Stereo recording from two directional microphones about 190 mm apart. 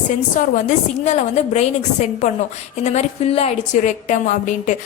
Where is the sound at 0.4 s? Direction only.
45° left (ahead or behind).